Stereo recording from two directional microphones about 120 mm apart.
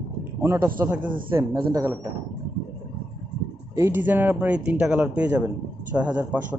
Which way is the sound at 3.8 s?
15° right (ahead or behind).